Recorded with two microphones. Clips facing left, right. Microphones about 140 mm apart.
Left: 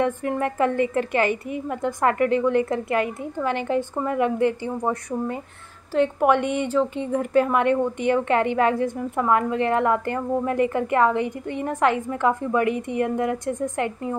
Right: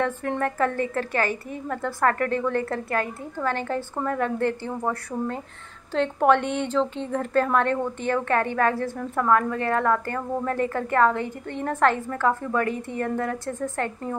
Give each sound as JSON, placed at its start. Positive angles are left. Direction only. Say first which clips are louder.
{"t": 0.0, "sound": "speech", "louder": "left 2 dB", "side_deg": 10}